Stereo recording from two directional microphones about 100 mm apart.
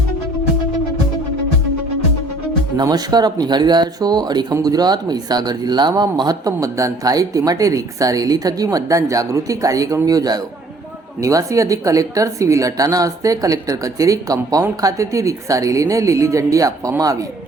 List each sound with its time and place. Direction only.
2.7 s speech: 40° right (ahead or behind)